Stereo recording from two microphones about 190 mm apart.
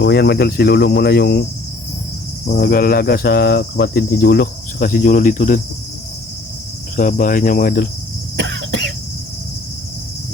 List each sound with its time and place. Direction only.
0.0 s cricket: 60° left (ahead or behind)
2.5 s cricket: 50° left (ahead or behind)
6.9 s cricket: 45° left (ahead or behind)
8.4 s cough: 65° right (ahead or behind)